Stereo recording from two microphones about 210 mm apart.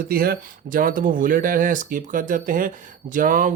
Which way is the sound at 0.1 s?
45° right (ahead or behind).